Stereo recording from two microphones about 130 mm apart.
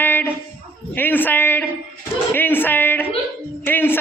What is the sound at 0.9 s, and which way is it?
Music, 15° left (ahead or behind).